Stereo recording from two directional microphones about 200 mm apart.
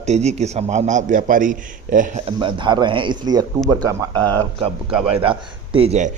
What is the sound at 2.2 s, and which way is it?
Speech, 25° right (ahead or behind).